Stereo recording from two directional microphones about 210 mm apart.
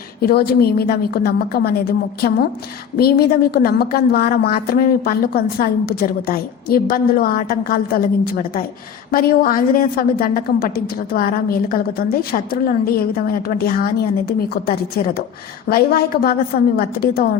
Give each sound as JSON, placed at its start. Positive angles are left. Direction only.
{"t": 0.2, "sound": "a woman's voice", "side_deg": 45}